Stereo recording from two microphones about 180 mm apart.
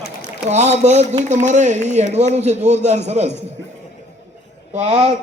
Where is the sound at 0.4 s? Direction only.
40° right (ahead or behind).